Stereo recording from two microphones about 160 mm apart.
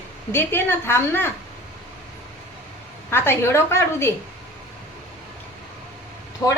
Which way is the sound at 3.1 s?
15° left (ahead or behind).